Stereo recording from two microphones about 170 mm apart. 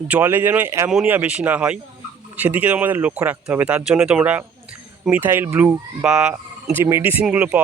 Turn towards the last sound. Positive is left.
turn(degrees=-10)  # may be behind; listen again after turning